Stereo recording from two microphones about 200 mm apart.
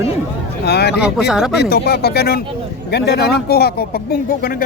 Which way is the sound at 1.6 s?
55° left (ahead or behind).